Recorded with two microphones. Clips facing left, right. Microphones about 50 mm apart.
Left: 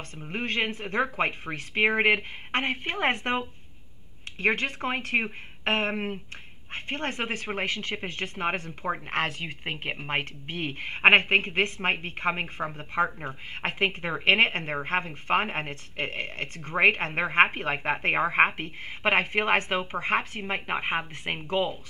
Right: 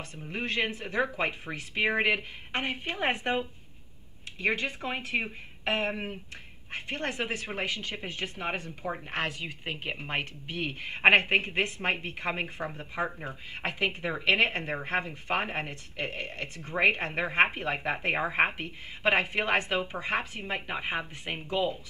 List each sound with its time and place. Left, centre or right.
0.2 s a woman's voice: left